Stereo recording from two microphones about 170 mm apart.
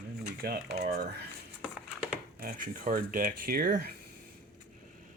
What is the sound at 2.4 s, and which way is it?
Speech, 55° right (ahead or behind).